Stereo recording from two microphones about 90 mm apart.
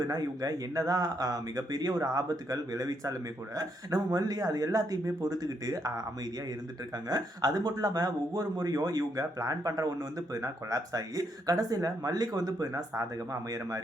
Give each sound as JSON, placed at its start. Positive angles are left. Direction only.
{"t": 0.1, "sound": "speech", "side_deg": -45}
{"t": 7.1, "sound": "speech", "side_deg": -45}